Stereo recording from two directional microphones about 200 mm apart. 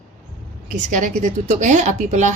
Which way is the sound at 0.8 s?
40° right (ahead or behind).